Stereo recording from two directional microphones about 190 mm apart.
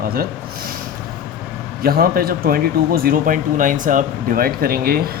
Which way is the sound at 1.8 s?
50° right (ahead or behind).